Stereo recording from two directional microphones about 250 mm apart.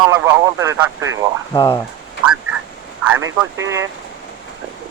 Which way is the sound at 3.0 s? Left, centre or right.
Centre.